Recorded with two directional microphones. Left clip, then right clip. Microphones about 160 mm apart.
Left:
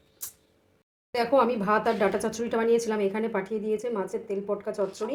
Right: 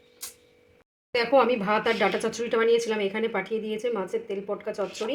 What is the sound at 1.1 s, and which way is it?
Speech, 15° left (ahead or behind).